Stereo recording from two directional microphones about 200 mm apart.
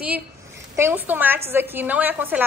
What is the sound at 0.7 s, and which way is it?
A woman's voice, 10° right (ahead or behind).